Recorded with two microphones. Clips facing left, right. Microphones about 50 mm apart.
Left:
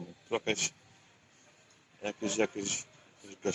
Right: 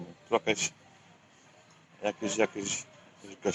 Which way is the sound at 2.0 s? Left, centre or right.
Right.